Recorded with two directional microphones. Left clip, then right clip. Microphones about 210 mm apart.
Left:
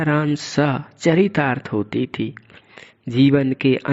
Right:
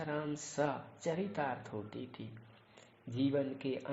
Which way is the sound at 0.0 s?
45° left (ahead or behind).